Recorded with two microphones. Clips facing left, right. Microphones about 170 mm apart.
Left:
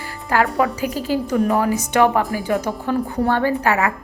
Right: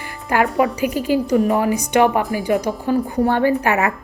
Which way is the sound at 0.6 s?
15° right (ahead or behind).